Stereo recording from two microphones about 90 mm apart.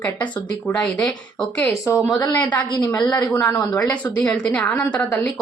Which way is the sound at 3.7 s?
15° left (ahead or behind).